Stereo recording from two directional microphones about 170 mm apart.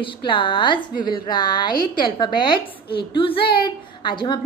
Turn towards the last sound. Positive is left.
turn(degrees=25)  # may be behind; listen again after turning